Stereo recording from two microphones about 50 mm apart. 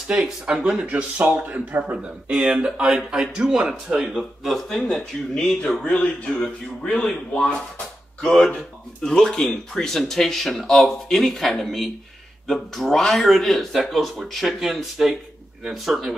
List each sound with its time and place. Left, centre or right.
0.1 s speech: centre
0.8 s speech: right
2.3 s speech: centre
4.1 s speech: centre
5.9 s speech: left
8.5 s speech: centre